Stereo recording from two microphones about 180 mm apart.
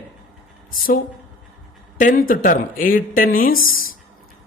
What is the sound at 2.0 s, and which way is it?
Speech, 50° left (ahead or behind).